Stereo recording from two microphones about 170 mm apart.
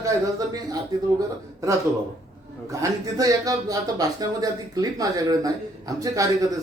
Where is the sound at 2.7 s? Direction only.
20° right (ahead or behind).